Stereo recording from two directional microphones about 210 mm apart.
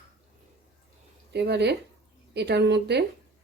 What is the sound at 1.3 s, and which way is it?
A woman's voice, 55° right (ahead or behind).